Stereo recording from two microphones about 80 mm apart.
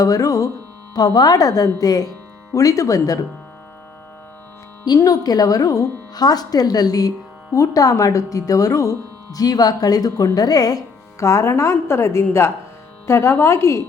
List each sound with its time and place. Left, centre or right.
0.0 s speech: left
0.9 s speech: left
4.9 s speech: left